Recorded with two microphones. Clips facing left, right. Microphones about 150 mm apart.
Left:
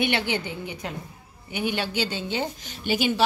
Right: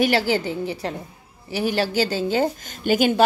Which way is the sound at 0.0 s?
40° right (ahead or behind).